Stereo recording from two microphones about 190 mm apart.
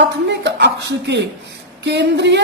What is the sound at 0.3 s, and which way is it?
A woman's voice, 65° right (ahead or behind).